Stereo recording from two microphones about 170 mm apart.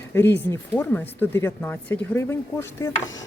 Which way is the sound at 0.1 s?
10° left (ahead or behind).